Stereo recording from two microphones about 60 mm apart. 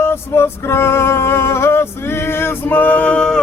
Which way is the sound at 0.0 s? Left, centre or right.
Left.